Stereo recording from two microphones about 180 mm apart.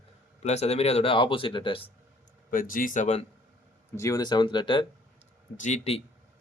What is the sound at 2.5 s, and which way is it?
Speech, 50° left (ahead or behind).